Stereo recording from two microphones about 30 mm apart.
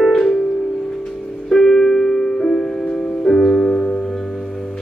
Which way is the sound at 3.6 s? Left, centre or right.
Left.